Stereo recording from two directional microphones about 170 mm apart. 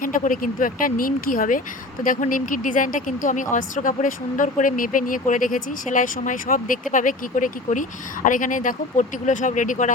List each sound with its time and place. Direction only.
0.0 s speech: 50° left (ahead or behind)